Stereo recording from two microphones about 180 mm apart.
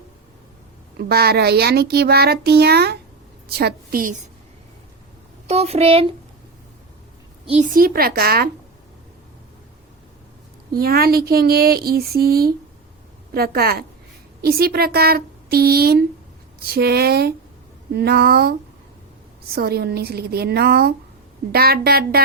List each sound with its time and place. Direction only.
0.9 s a child's voice: 60° right (ahead or behind); by 4.3 s 45° right (ahead or behind)
5.5 s a child's voice: 35° right (ahead or behind)
7.4 s a woman's voice: 35° right (ahead or behind)
7.7 s speech: 55° right (ahead or behind)
10.7 s speech: 60° right (ahead or behind)
19.5 s speech: 60° right (ahead or behind)